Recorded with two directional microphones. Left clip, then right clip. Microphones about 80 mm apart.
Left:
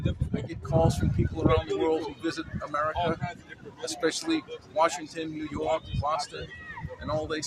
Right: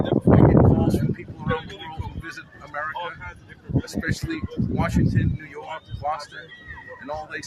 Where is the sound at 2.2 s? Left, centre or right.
Left.